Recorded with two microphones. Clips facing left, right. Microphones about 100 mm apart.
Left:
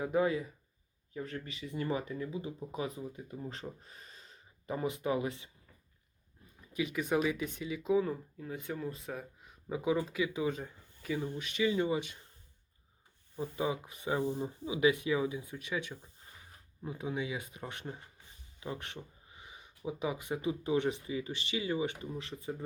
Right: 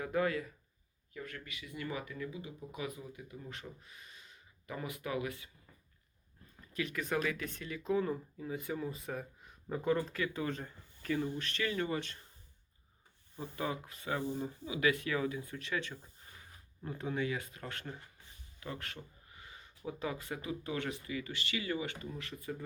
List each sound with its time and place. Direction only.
0.0 s speech: 20° left (ahead or behind)
1.1 s speech: 30° left (ahead or behind)
6.6 s speech: 15° left (ahead or behind)
13.3 s speech: 10° left (ahead or behind)